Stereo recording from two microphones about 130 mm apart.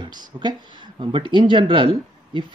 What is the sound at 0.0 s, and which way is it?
Speech, 35° right (ahead or behind).